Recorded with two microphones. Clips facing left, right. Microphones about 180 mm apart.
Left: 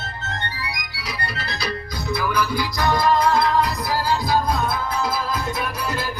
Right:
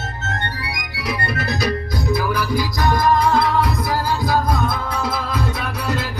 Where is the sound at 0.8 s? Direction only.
60° right (ahead or behind).